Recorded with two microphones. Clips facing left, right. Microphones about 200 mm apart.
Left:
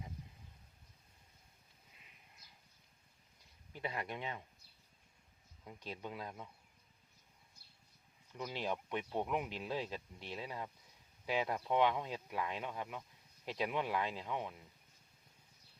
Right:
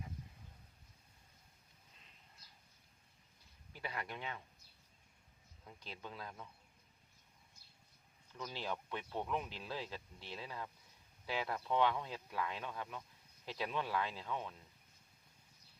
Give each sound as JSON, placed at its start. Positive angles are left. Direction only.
{"t": 3.7, "sound": "speech", "side_deg": 20}
{"t": 5.6, "sound": "speech", "side_deg": 20}
{"t": 8.4, "sound": "speech", "side_deg": 15}